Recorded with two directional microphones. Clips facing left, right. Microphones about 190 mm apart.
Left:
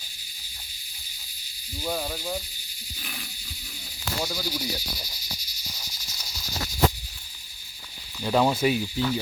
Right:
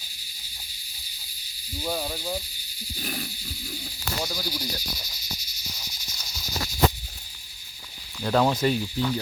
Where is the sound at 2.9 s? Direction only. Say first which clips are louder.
Right 8 dB; 40° right (ahead or behind).